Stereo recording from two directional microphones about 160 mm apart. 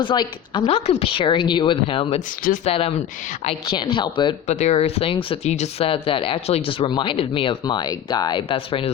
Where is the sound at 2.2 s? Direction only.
60° left (ahead or behind).